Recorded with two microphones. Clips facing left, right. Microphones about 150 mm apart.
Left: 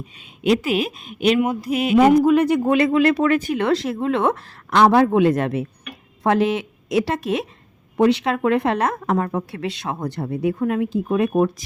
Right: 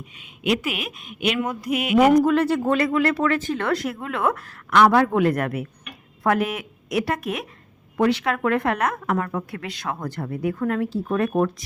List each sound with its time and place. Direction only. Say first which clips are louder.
0.0 s speech: left 5 dB; 35° left (ahead or behind)
2.2 s speech: left 3 dB; 15° left (ahead or behind)